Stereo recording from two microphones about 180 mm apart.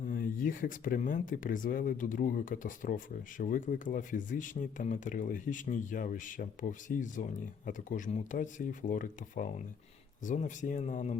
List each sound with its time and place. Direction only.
0.0 s speech: 50° left (ahead or behind)